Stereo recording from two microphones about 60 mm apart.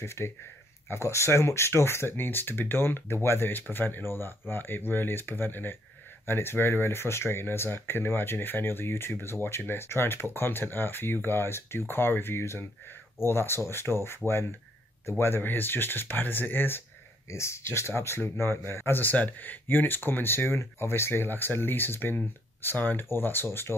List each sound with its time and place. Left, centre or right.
0.0 s speech: left
17.3 s speech: left